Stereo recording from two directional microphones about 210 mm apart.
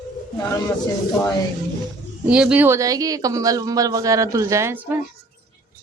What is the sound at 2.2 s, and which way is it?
Speech, 5° right (ahead or behind).